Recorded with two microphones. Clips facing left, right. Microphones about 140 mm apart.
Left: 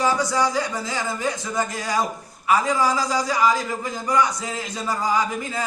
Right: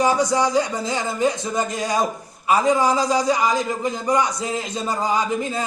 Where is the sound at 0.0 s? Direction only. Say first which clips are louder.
Right 3 dB; 20° right (ahead or behind).